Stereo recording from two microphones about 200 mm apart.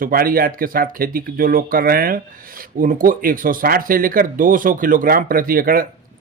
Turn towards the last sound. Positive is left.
turn(degrees=-45)  # may be behind; listen again after turning